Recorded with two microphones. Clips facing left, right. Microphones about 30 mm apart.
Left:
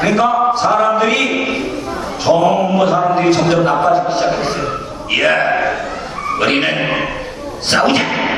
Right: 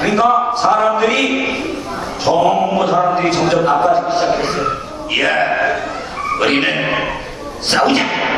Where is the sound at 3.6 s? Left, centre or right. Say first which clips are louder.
Even; centre.